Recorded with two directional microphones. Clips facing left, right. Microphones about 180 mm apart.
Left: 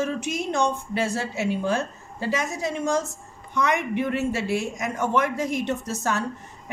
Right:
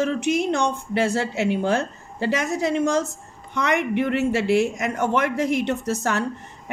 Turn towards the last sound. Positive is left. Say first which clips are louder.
# right 3 dB
turn(degrees=-65)  # may be behind; listen again after turning